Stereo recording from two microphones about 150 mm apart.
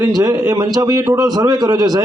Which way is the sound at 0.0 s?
25° right (ahead or behind).